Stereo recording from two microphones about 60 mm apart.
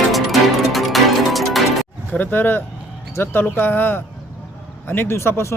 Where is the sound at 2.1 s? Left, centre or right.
Left.